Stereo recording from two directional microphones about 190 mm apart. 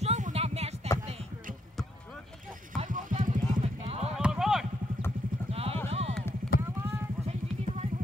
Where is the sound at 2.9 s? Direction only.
45° right (ahead or behind).